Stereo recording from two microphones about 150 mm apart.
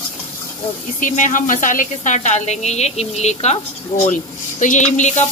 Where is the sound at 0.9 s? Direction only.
55° left (ahead or behind).